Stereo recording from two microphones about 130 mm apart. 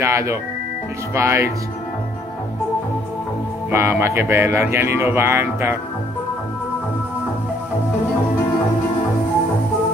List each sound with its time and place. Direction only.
0.0 s speech: 20° right (ahead or behind)
3.7 s speech: 20° right (ahead or behind)